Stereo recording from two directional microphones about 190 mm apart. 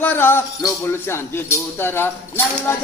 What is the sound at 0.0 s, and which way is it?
Music, 10° left (ahead or behind).